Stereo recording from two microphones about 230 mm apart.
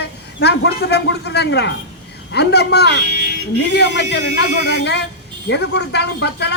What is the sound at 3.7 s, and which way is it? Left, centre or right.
Speech, left.